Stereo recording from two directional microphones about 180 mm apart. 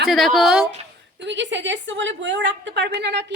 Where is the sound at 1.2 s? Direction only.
85° right.